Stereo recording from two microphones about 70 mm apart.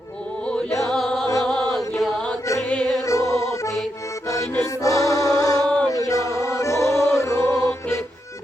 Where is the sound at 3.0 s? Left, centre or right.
Left.